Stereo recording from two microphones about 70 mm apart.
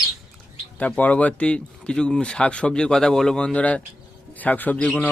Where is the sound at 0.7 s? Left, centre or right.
Centre.